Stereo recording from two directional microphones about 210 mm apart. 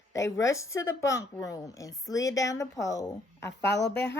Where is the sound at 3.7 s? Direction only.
55° left (ahead or behind).